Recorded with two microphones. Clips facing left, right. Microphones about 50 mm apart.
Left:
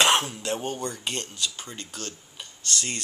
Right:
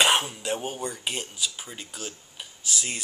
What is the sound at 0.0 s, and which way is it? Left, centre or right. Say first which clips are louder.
Speech: left 1 dB; centre.